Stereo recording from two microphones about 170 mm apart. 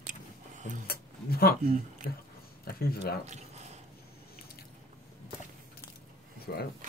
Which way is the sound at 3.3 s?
40° right (ahead or behind).